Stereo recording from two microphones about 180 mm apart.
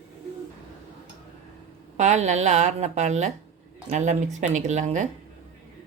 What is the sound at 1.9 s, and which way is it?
Speech, 40° right (ahead or behind).